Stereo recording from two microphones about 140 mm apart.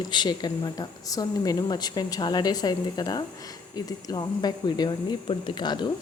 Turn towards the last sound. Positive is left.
turn(degrees=30)  # may be behind; listen again after turning